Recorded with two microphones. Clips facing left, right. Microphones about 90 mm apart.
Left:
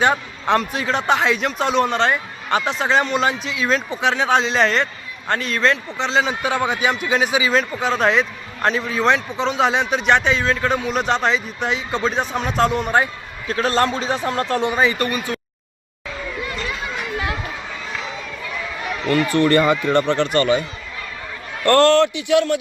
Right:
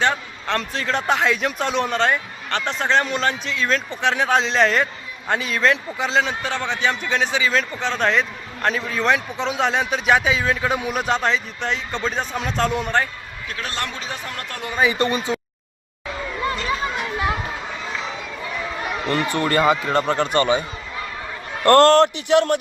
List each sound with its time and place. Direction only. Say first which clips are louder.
0.0 s a man's voice: left 3 dB; 15° left (ahead or behind); by 6.3 s centre (ahead or behind)
6.4 s a man's voice: left 3 dB; 10° left (ahead or behind)
13.5 s a man's voice: left 10 dB; 35° left (ahead or behind)
14.9 s speech: right 2 dB; 25° right (ahead or behind)
18.8 s a sound: left 4 dB; 30° right (ahead or behind)
19.4 s speech: left 2 dB; 15° right (ahead or behind)
20.3 s speech: left 1 dB; 20° right (ahead or behind)
21.6 s a man's voice: right 1 dB; 35° right (ahead or behind)